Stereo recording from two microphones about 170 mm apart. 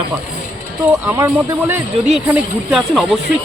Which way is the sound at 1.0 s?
15° right (ahead or behind).